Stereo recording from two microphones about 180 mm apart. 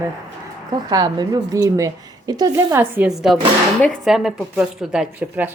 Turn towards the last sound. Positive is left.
turn(degrees=-10)  # may be behind; listen again after turning